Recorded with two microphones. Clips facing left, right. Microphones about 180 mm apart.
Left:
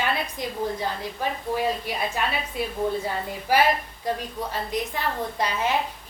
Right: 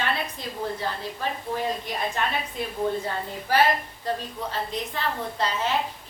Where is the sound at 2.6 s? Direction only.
10° left (ahead or behind).